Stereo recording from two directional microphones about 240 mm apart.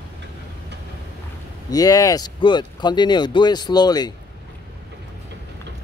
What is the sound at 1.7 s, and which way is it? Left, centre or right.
Speech, centre.